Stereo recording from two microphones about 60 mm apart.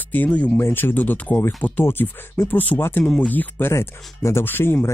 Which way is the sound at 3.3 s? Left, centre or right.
Left.